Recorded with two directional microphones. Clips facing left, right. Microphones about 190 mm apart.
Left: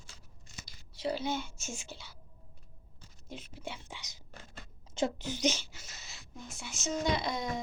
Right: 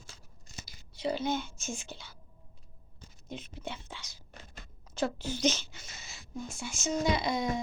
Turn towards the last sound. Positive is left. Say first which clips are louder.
# right 3 dB
turn(degrees=0)  # may be behind; listen again after turning